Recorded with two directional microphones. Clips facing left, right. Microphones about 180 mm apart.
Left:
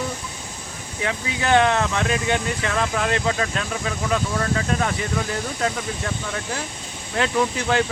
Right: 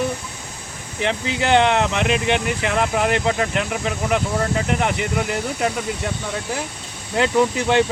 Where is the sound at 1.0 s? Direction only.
25° right (ahead or behind).